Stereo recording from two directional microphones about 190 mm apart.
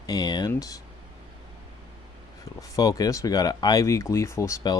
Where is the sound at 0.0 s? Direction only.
20° left (ahead or behind).